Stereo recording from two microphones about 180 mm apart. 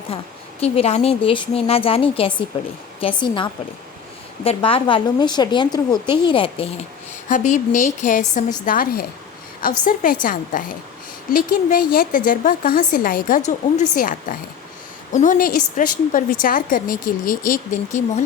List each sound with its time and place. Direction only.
0.6 s a woman's voice: 35° left (ahead or behind)
7.3 s a woman's voice: 45° left (ahead or behind)